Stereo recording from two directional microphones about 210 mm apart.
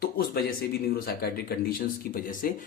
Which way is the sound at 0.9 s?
45° left (ahead or behind).